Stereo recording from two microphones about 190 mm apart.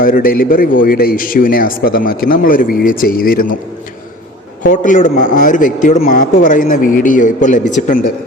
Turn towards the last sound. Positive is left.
turn(degrees=40)  # may be behind; listen again after turning